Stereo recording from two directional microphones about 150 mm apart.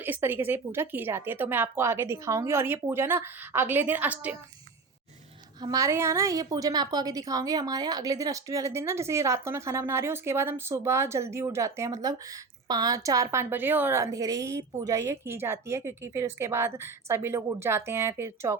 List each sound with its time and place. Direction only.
0.0 s a woman's voice: 15° right (ahead or behind)
5.6 s a woman's voice: 20° right (ahead or behind)